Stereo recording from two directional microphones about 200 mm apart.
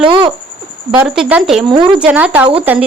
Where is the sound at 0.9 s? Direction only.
5° right (ahead or behind).